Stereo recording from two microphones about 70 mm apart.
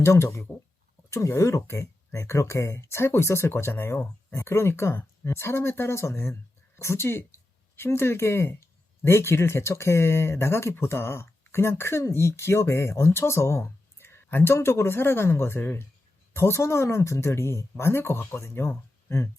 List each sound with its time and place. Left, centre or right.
0.0 s speech: left